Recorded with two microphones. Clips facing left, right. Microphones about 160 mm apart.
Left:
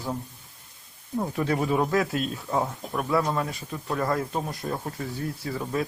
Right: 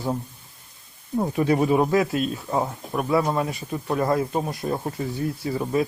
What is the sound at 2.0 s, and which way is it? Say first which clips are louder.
Speech: right 4 dB; 5° right (ahead or behind).